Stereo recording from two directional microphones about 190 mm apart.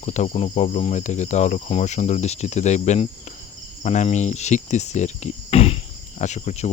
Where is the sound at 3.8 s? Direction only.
40° left (ahead or behind).